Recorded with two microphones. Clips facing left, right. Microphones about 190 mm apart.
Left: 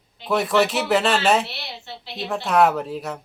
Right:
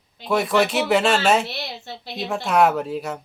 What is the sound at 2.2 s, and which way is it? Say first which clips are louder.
Speech: even; centre (ahead or behind).